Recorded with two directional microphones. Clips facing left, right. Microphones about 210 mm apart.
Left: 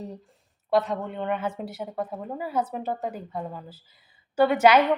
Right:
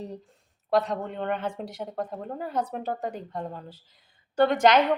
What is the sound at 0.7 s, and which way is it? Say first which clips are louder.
A woman's voice: left 1 dB; centre (ahead or behind).